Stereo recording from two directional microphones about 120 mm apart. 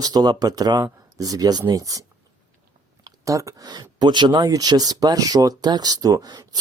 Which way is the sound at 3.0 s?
25° right (ahead or behind).